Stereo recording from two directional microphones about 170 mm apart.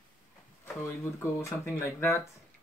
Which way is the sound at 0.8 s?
15° left (ahead or behind).